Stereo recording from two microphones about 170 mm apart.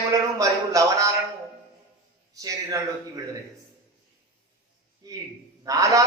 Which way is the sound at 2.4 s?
20° right (ahead or behind).